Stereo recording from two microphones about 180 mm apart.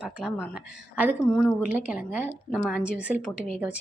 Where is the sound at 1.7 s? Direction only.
10° right (ahead or behind).